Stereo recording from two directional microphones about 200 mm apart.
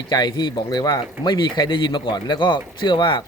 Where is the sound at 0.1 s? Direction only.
20° left (ahead or behind).